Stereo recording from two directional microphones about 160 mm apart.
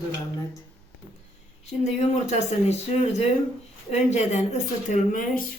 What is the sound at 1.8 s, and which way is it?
Speech, 45° left (ahead or behind).